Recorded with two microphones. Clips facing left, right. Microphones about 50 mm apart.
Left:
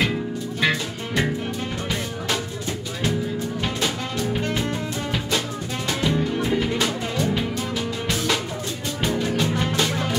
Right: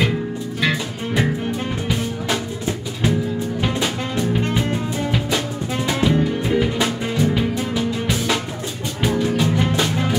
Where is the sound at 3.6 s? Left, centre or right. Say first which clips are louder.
Right 4 dB; centre.